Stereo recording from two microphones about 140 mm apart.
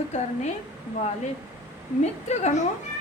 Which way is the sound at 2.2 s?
55° left (ahead or behind).